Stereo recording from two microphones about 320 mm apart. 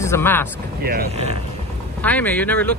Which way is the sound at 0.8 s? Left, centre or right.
Right.